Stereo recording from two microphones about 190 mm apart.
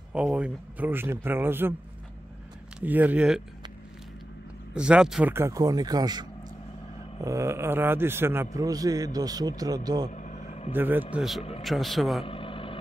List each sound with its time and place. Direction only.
0.1 s a man's voice: 5° right (ahead or behind)
2.8 s a man's voice: 10° right (ahead or behind)
4.7 s a man's voice: 5° right (ahead or behind); by 10.1 s 20° right (ahead or behind)
10.1 s vehicle: 40° left (ahead or behind)
10.7 s a man's voice: 10° right (ahead or behind)
12.3 s vehicle: 30° left (ahead or behind)